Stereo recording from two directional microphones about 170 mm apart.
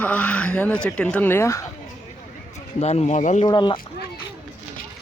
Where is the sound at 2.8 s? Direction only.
40° left (ahead or behind).